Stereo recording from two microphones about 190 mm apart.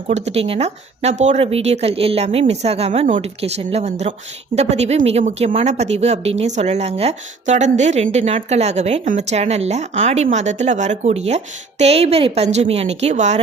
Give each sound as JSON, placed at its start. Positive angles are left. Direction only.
{"t": 0.1, "sound": "a woman's voice", "side_deg": -35}